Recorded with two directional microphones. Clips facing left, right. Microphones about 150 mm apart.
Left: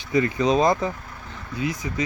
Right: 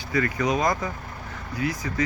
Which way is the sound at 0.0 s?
20° left (ahead or behind).